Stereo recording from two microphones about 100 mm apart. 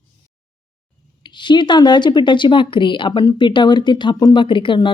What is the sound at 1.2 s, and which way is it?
Speech, 50° left (ahead or behind).